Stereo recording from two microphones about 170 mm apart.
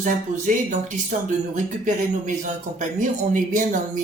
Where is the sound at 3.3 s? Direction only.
50° right (ahead or behind).